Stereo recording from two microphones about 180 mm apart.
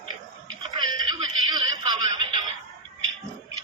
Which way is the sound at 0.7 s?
20° right (ahead or behind).